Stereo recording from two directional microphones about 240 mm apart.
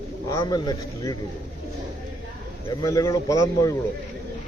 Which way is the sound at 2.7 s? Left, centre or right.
Centre.